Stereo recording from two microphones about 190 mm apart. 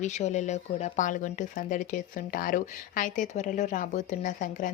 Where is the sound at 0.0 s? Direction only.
40° left (ahead or behind).